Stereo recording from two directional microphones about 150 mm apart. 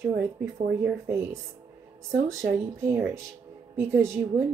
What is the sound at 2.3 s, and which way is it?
Speech, 20° right (ahead or behind).